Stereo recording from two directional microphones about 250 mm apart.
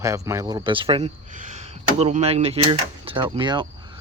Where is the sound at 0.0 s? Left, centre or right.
Centre.